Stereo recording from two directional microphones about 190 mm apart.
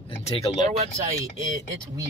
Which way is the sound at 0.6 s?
35° right (ahead or behind).